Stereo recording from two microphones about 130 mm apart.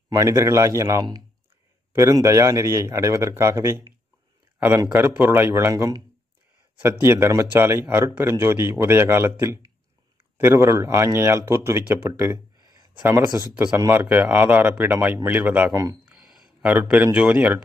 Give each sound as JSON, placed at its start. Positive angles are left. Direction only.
{"t": 0.1, "sound": "a man's voice", "side_deg": -25}
{"t": 12.5, "sound": "a sound", "side_deg": -30}
{"t": 13.7, "sound": "a man's voice", "side_deg": -20}
{"t": 15.7, "sound": "a man's voice", "side_deg": -25}
{"t": 16.1, "sound": "a sound", "side_deg": -5}
{"t": 16.6, "sound": "speech", "side_deg": -10}